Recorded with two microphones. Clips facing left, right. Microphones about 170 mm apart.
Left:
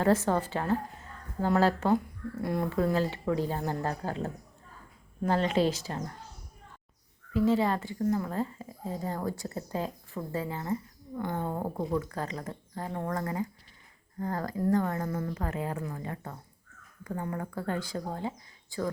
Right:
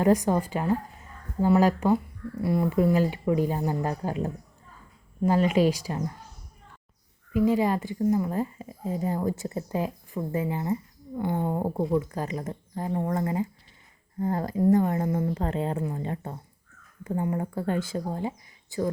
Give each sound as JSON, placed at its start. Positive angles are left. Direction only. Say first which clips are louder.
{"t": 0.0, "sound": "speech", "louder": "right 3 dB", "side_deg": -15}
{"t": 2.4, "sound": "speech", "louder": "right 5 dB", "side_deg": 0}
{"t": 2.6, "sound": "speech", "louder": "right 5 dB", "side_deg": -10}
{"t": 7.3, "sound": "a woman's voice", "louder": "right 3 dB", "side_deg": -15}